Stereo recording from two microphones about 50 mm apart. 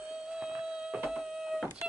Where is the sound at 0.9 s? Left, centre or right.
Centre.